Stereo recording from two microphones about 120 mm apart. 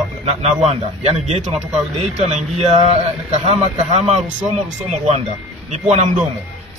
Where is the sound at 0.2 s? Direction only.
60° right (ahead or behind).